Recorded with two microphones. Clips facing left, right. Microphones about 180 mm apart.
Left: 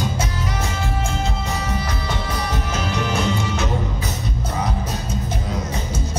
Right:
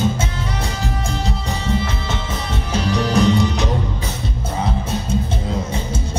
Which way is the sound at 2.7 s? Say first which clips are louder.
Right 8 dB; 35° right (ahead or behind).